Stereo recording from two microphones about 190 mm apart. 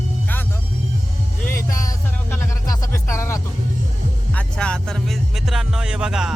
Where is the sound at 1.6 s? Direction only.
15° left (ahead or behind); by 6.3 s 5° right (ahead or behind).